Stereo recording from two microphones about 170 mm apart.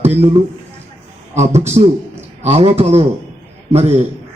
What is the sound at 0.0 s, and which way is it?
A man's voice, 35° right (ahead or behind).